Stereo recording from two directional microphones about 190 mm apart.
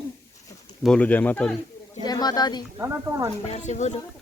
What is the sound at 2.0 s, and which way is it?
Speech, 20° left (ahead or behind).